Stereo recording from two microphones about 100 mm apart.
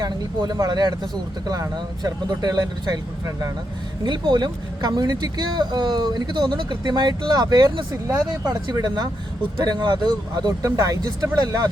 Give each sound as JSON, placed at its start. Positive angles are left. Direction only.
{"t": 0.0, "sound": "speech", "side_deg": -40}